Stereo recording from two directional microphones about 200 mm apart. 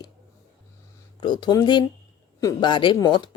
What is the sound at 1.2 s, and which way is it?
A woman's voice, 20° left (ahead or behind).